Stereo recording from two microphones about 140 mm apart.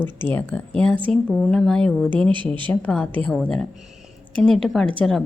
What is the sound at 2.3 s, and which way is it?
Speech, 35° right (ahead or behind).